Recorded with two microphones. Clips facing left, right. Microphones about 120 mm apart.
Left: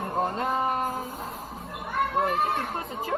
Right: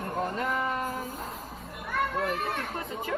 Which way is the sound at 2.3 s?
30° left (ahead or behind).